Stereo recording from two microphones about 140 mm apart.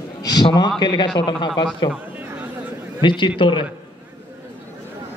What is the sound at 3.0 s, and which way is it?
Speech, 35° left (ahead or behind).